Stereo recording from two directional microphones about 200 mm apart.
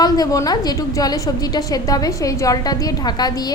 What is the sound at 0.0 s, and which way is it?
A woman's voice, 20° left (ahead or behind).